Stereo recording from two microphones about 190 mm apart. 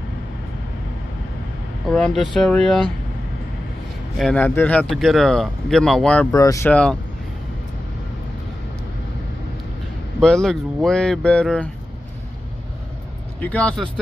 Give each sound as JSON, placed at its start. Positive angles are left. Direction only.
{"t": 1.9, "sound": "speech", "side_deg": 5}
{"t": 4.2, "sound": "speech", "side_deg": 5}
{"t": 6.3, "sound": "speech", "side_deg": 15}
{"t": 6.7, "sound": "speech", "side_deg": 5}
{"t": 10.2, "sound": "speech", "side_deg": 5}
{"t": 13.4, "sound": "speech", "side_deg": 5}